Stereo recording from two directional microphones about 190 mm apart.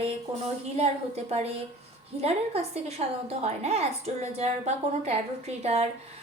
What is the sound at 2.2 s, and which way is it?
A woman's voice, 35° right (ahead or behind).